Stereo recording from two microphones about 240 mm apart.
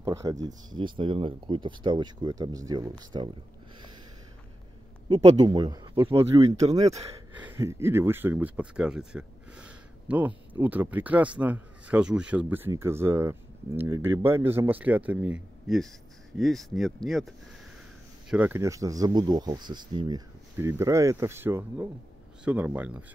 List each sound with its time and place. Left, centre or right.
0.0 s speech: centre
5.1 s speech: right
7.3 s speech: centre
18.3 s speech: centre